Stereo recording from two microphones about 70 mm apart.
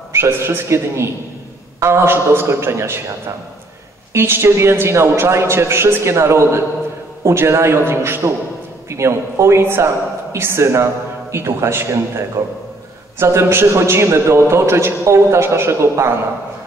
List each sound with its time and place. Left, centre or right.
0.1 s a man's voice: right
4.1 s a man's voice: right